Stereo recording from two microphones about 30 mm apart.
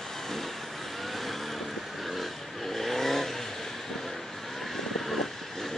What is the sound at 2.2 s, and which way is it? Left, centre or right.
Vehicle, centre.